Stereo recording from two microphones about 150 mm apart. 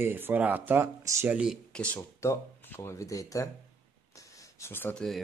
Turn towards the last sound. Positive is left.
turn(degrees=15)  # may be behind; listen again after turning